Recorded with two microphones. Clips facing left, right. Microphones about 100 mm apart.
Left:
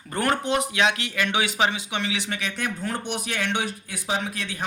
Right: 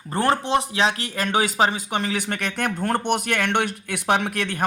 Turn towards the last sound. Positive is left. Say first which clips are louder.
# right 6 dB
turn(degrees=-60)  # may be behind; listen again after turning